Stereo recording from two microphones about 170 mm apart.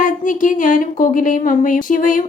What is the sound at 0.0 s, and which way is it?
Speech, 50° left (ahead or behind).